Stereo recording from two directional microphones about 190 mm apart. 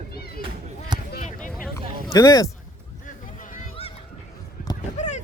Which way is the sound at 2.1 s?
20° left (ahead or behind).